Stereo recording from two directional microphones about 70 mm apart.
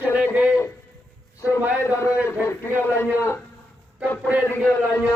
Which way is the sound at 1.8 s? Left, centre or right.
Left.